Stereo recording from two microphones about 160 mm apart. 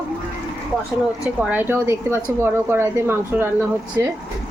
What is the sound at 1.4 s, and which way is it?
Speech, 10° right (ahead or behind).